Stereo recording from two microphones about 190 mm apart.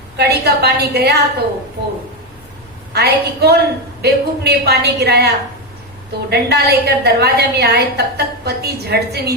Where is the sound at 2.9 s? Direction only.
60° right (ahead or behind).